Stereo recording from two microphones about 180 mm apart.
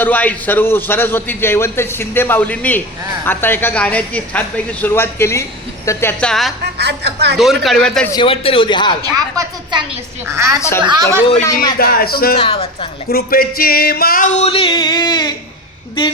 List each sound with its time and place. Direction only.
0.0 s speech: 10° left (ahead or behind)
6.7 s speech: 65° right (ahead or behind)
7.3 s speech: centre (ahead or behind)
8.1 s speech: 30° left (ahead or behind)
9.1 s a woman's voice: 20° right (ahead or behind)
10.6 s speech: 15° left (ahead or behind)
11.8 s speech: 55° left (ahead or behind)
12.4 s music: 30° left (ahead or behind)
13.1 s music: 55° left (ahead or behind); by 15.4 s 25° left (ahead or behind)